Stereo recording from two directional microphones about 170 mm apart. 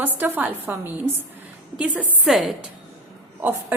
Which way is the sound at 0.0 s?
10° right (ahead or behind).